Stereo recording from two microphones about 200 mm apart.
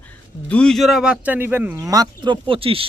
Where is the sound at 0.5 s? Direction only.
5° left (ahead or behind).